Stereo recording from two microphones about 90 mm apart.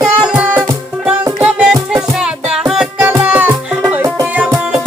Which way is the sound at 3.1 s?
20° right (ahead or behind).